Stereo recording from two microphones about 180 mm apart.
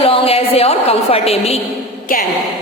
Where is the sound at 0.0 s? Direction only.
30° left (ahead or behind).